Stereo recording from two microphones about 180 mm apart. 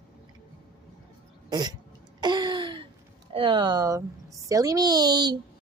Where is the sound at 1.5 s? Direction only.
25° right (ahead or behind).